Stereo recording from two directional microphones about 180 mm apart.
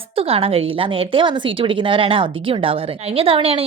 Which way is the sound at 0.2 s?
30° right (ahead or behind).